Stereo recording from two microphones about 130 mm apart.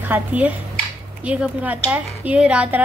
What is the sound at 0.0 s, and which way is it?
Speech, 15° right (ahead or behind).